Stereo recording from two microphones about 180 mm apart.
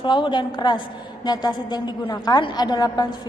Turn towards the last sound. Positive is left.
turn(degrees=20)  # may be behind; listen again after turning